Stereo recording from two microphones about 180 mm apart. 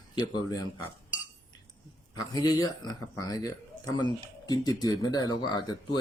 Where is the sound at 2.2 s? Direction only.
20° left (ahead or behind).